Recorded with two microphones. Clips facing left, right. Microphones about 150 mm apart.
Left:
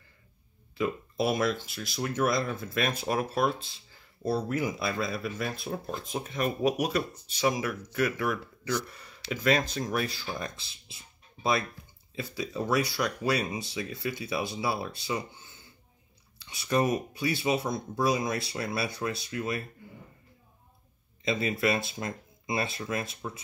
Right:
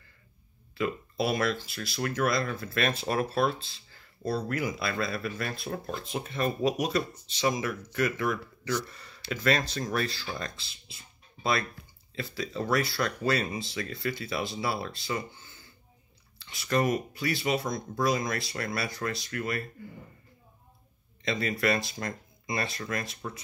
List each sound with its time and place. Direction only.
0.7 s speech: 20° left (ahead or behind)
5.7 s speech: 5° left (ahead or behind)
21.4 s speech: 15° left (ahead or behind)
22.0 s speech: 10° left (ahead or behind)